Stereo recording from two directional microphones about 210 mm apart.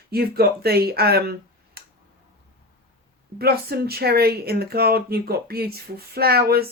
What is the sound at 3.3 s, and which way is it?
Speech, 50° right (ahead or behind).